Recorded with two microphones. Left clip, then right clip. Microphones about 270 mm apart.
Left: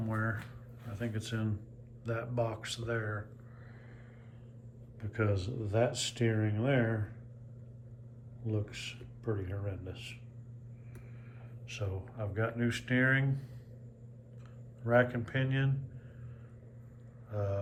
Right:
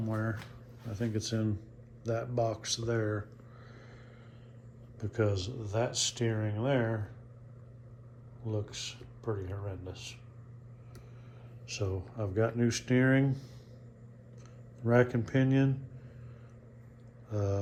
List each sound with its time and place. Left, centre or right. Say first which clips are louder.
0.0 s a sound: even; centre
0.9 s speech: right 4 dB; centre
4.9 s speech: right 3 dB; centre
5.9 s speech: right 3 dB; right
6.2 s speech: left 1 dB; centre
6.7 s speech: right 1 dB; right
8.4 s speech: right 1 dB; right
11.7 s speech: right 5 dB; right
14.8 s speech: right 1 dB; right
17.2 s mantra: right 2 dB; right